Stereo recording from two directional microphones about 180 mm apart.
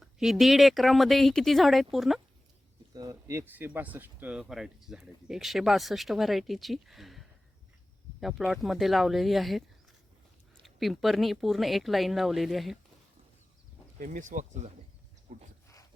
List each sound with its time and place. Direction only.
0.0 s speech: centre (ahead or behind)
2.9 s speech: 20° right (ahead or behind); by 12.8 s centre (ahead or behind)
14.0 s speech: 45° right (ahead or behind)